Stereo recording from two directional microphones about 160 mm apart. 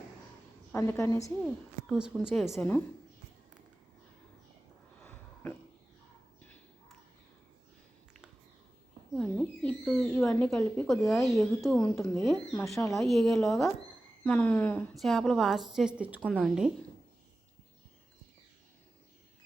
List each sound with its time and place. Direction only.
0.7 s a woman's voice: 15° left (ahead or behind)
1.9 s a woman's voice: 5° right (ahead or behind)
5.0 s a sound: 10° left (ahead or behind)
9.1 s owl: 5° left (ahead or behind)
10.8 s a woman's voice: centre (ahead or behind)
11.8 s a woman's voice: 25° left (ahead or behind)
12.1 s a woman's voice: centre (ahead or behind)